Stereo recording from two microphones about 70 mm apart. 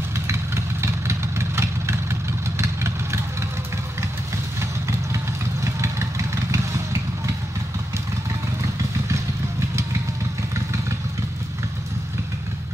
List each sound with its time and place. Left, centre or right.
0.3 s vehicle: right
4.6 s vehicle: right